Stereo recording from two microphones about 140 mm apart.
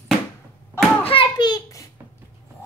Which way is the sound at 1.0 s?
35° left (ahead or behind).